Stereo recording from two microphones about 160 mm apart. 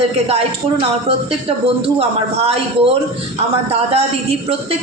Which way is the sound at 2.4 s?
35° right (ahead or behind).